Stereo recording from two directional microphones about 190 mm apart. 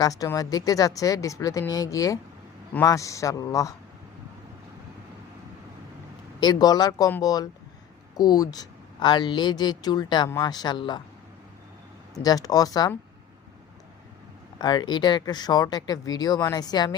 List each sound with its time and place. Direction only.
0.0 s a woman's voice: 20° left (ahead or behind)
6.4 s a woman's voice: 20° left (ahead or behind)
12.1 s a woman's voice: 20° left (ahead or behind)
14.6 s a woman's voice: 20° left (ahead or behind)